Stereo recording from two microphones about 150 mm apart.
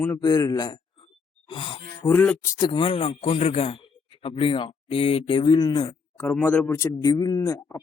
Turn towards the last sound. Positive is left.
turn(degrees=20)  # may be behind; listen again after turning